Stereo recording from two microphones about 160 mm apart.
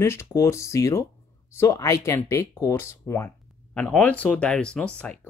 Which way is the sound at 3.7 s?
5° left (ahead or behind).